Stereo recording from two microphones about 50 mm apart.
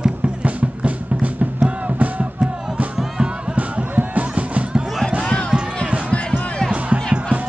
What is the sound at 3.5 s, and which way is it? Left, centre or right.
Music, right.